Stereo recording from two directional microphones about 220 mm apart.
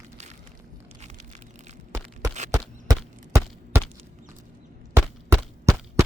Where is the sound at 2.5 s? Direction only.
15° right (ahead or behind).